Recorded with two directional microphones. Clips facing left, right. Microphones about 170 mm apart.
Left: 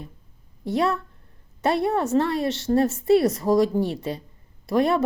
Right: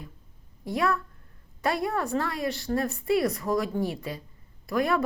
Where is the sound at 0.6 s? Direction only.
30° left (ahead or behind).